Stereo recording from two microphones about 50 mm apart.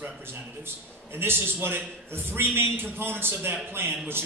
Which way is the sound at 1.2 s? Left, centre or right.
Right.